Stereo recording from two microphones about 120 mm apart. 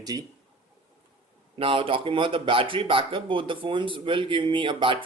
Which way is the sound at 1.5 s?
50° right (ahead or behind).